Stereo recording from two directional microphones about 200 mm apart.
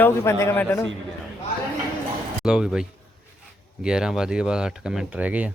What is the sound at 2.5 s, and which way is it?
Speech, 5° right (ahead or behind).